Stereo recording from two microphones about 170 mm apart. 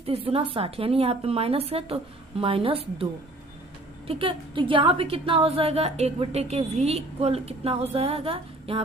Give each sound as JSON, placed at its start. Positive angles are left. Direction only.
{"t": 0.0, "sound": "a woman's voice", "side_deg": -35}